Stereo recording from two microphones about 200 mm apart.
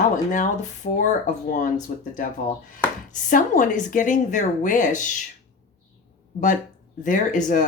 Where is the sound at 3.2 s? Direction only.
40° left (ahead or behind).